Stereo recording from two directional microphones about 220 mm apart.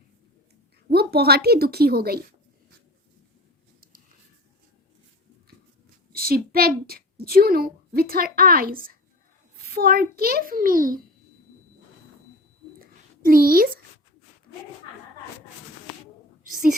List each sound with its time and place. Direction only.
0.9 s a woman's voice: 45° right (ahead or behind)
6.1 s a woman's voice: 45° right (ahead or behind)
12.8 s a sound: 40° right (ahead or behind)
16.5 s whispering: 35° right (ahead or behind)